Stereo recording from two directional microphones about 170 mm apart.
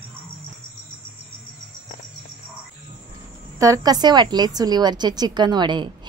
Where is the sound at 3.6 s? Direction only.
20° right (ahead or behind).